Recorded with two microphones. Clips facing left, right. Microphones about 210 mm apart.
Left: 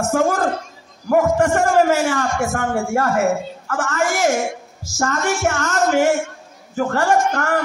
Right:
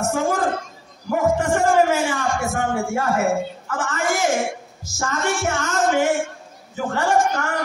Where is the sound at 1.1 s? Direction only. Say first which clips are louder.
Left 4 dB; 50° left (ahead or behind).